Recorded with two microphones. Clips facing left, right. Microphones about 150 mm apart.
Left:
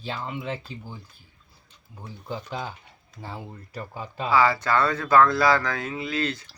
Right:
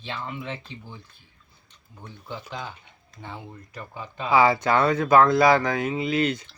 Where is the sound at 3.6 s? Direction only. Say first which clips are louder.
Left 2 dB; 35° left (ahead or behind).